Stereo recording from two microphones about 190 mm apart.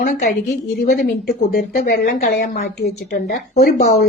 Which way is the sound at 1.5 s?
55° left (ahead or behind).